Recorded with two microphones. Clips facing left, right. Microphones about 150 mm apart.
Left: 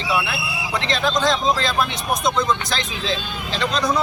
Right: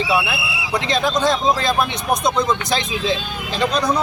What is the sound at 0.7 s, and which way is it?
Speech, 15° right (ahead or behind).